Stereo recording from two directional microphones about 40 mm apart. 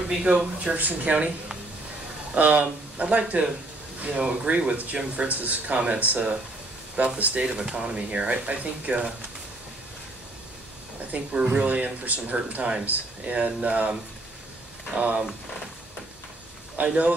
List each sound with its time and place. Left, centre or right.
0.2 s speech: centre
0.7 s speech: right
2.3 s speech: right
7.4 s speech: right
11.1 s speech: right
15.0 s speech: right
16.8 s speech: right